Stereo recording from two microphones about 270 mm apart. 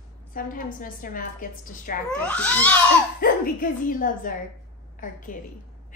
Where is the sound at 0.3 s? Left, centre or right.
Left.